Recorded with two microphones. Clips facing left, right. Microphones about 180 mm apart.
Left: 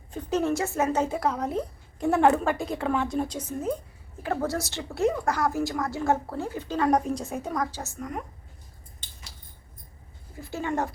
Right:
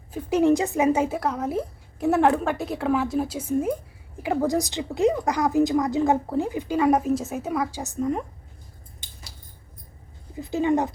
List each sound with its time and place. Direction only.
0.1 s a woman's voice: 10° right (ahead or behind); by 8.2 s 25° right (ahead or behind)
10.3 s a woman's voice: 15° right (ahead or behind)